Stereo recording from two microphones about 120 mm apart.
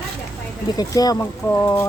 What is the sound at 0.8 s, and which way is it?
Speech, 30° left (ahead or behind).